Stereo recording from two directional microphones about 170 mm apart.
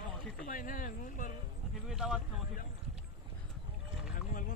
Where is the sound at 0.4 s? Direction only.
55° left (ahead or behind).